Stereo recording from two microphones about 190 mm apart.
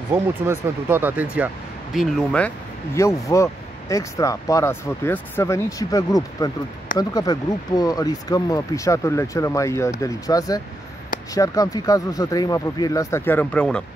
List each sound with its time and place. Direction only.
0.1 s speech: 10° right (ahead or behind)
2.0 s speech: 5° left (ahead or behind)